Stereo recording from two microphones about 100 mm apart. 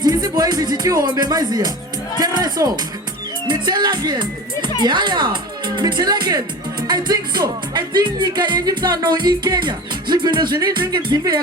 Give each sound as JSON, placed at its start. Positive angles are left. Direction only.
{"t": 0.0, "sound": "music", "side_deg": -40}
{"t": 2.1, "sound": "speech", "side_deg": -45}